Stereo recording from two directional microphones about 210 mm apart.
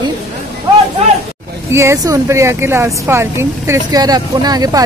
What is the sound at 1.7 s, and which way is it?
Speech, 15° right (ahead or behind).